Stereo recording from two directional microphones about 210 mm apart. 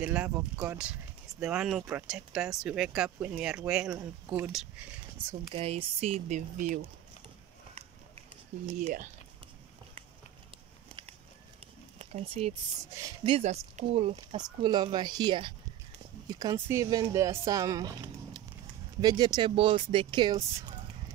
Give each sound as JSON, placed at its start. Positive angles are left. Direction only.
{"t": 0.0, "sound": "speech", "side_deg": -5}
{"t": 5.5, "sound": "speech", "side_deg": -25}
{"t": 8.6, "sound": "speech", "side_deg": -35}
{"t": 10.9, "sound": "a sound", "side_deg": -25}
{"t": 12.0, "sound": "speech", "side_deg": -30}
{"t": 12.9, "sound": "speech", "side_deg": -20}
{"t": 14.6, "sound": "speech", "side_deg": -20}